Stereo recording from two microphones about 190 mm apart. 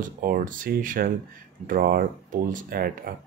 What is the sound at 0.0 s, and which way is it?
Speech, 45° right (ahead or behind).